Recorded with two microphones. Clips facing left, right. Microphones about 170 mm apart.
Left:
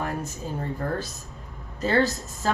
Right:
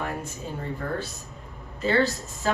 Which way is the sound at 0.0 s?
40° left (ahead or behind).